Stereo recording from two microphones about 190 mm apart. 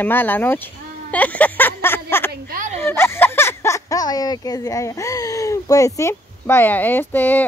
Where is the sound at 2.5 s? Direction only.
40° right (ahead or behind).